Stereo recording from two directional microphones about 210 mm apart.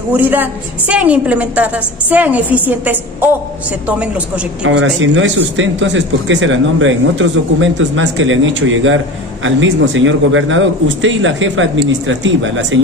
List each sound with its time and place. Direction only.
0.1 s a woman's voice: 10° right (ahead or behind)
4.6 s speech: 60° right (ahead or behind)